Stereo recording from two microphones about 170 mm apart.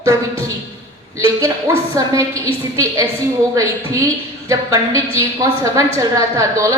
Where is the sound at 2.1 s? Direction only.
20° right (ahead or behind).